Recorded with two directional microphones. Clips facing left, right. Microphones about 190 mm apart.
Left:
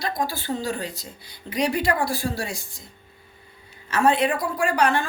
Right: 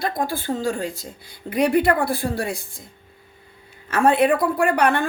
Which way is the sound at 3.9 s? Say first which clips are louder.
Right 3 dB; 55° right (ahead or behind).